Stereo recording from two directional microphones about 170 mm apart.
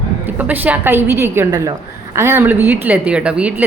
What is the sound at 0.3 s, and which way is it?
A woman's voice, 10° right (ahead or behind).